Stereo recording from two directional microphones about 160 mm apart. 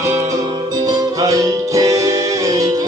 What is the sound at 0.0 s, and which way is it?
Music, 20° right (ahead or behind).